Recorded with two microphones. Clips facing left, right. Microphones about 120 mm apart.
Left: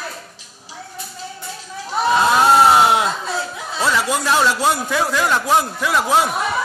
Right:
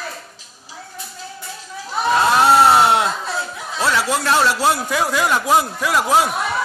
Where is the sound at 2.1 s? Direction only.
Centre (ahead or behind).